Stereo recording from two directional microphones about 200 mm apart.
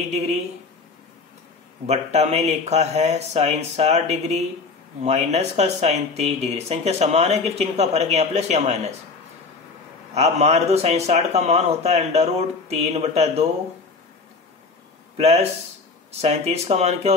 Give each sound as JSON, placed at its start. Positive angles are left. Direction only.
{"t": 0.1, "sound": "speech", "side_deg": -35}
{"t": 1.9, "sound": "speech", "side_deg": -35}
{"t": 10.1, "sound": "speech", "side_deg": -35}
{"t": 15.1, "sound": "speech", "side_deg": -30}